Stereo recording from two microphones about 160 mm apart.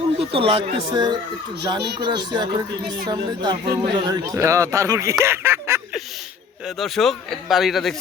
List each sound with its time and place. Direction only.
0.2 s speech: 35° right (ahead or behind)
1.8 s speech: 90° right
2.0 s speech: 25° right (ahead or behind)
6.7 s speech: centre (ahead or behind)